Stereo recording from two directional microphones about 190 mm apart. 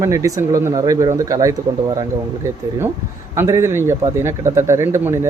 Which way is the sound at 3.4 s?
15° right (ahead or behind).